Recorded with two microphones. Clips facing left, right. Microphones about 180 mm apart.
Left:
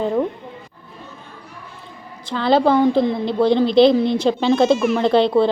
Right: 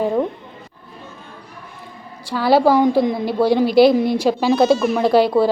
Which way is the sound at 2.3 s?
10° right (ahead or behind).